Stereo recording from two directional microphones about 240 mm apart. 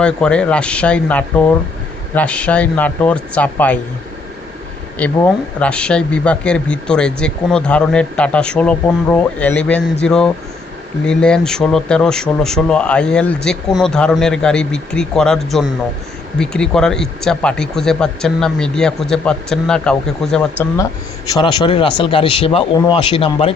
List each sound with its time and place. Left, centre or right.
0.0 s speech: centre
4.9 s speech: centre
21.4 s speech: left